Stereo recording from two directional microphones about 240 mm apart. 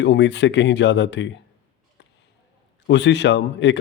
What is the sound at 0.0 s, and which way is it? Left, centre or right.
A man's voice, left.